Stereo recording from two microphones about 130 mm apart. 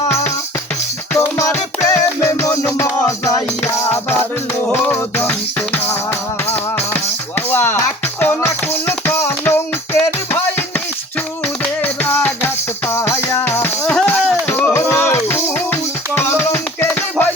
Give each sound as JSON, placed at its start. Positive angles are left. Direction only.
{"t": 0.1, "sound": "music", "side_deg": 20}
{"t": 11.6, "sound": "music", "side_deg": 15}